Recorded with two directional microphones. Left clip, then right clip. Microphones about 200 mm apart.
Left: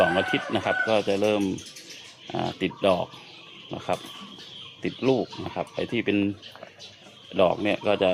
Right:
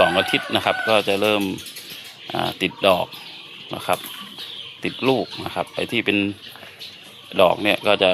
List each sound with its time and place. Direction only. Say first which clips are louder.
0.0 s speech: right 5 dB; 15° right (ahead or behind)
7.3 s speech: right 6 dB; 15° right (ahead or behind)